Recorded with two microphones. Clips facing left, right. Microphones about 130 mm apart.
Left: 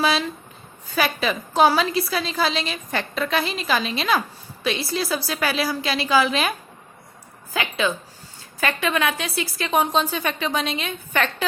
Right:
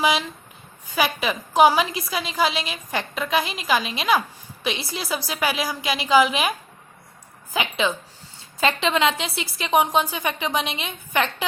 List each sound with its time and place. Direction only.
0.0 s a woman's voice: 15° right (ahead or behind)
7.5 s a woman's voice: 20° right (ahead or behind)